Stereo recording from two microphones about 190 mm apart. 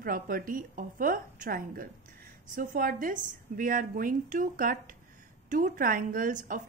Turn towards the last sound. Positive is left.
turn(degrees=-45)  # may be behind; listen again after turning